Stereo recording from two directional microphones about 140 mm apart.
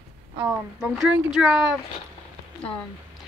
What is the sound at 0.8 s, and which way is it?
Speech, 5° right (ahead or behind).